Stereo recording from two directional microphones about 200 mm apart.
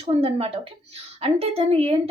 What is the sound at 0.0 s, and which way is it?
Speech, 30° right (ahead or behind).